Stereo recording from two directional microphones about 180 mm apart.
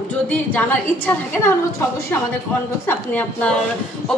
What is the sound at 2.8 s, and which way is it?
Speech, 10° left (ahead or behind).